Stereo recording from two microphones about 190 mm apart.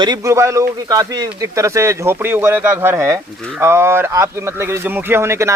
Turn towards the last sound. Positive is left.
turn(degrees=-15)  # may be behind; listen again after turning